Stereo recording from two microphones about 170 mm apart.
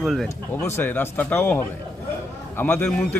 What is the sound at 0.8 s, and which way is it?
Speech, 10° left (ahead or behind).